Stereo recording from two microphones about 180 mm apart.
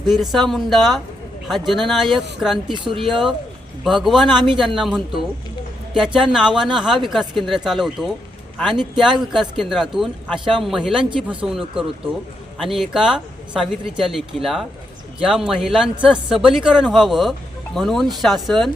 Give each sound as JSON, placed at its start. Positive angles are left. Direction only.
{"t": 0.1, "sound": "speech", "side_deg": 0}
{"t": 2.8, "sound": "speech", "side_deg": -25}
{"t": 3.8, "sound": "speech", "side_deg": 0}
{"t": 12.6, "sound": "speech", "side_deg": 0}